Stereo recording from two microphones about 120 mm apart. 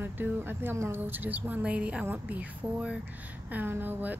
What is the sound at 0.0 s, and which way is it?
Speech, 15° right (ahead or behind).